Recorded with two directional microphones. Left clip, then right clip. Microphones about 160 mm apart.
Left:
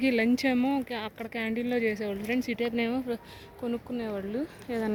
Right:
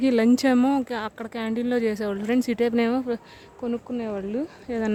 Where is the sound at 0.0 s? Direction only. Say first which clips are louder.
Right 5 dB; 45° right (ahead or behind).